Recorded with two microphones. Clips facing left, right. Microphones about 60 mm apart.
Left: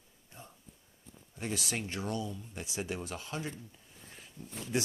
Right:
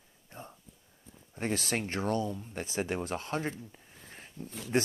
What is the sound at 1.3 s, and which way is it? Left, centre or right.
Speech, right.